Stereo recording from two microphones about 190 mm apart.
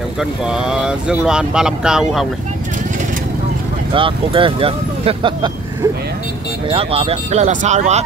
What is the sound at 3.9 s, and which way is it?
Speech, 25° right (ahead or behind).